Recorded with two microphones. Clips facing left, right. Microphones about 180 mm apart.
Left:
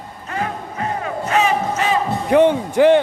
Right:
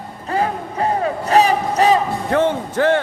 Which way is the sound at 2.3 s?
15° left (ahead or behind).